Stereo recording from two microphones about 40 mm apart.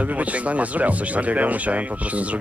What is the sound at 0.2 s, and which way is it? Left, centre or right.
Speech, right.